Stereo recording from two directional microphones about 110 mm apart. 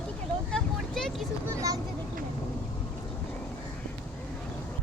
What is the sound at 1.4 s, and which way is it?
Speech, 30° right (ahead or behind).